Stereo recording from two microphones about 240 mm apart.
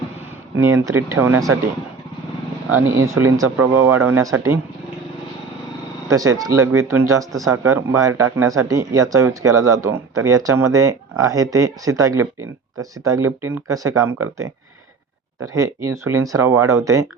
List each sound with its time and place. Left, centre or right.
0.5 s speech: centre
2.6 s speech: right
3.3 s speech: centre
6.1 s speech: centre
15.6 s speech: centre